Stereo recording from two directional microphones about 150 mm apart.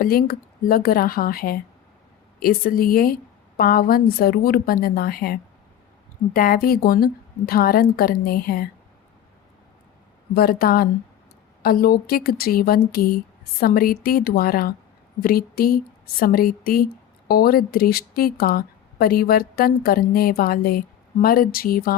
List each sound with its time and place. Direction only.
0.0 s speech: 90° left
10.3 s a woman's voice: 85° left
13.6 s speech: 75° left (ahead or behind)